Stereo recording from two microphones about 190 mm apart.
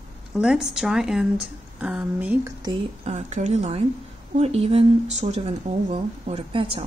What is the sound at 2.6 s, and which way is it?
Speech, 35° right (ahead or behind).